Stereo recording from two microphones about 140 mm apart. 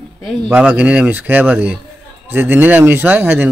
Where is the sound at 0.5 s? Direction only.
10° right (ahead or behind).